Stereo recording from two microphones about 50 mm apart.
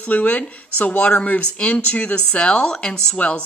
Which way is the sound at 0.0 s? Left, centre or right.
Left.